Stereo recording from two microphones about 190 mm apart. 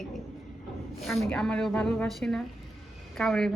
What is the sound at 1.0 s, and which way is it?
A woman's voice, centre (ahead or behind).